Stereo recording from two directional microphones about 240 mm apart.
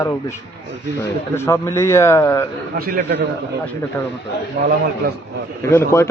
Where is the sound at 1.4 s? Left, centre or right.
Centre.